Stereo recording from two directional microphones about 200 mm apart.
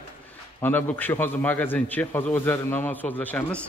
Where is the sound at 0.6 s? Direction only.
10° left (ahead or behind).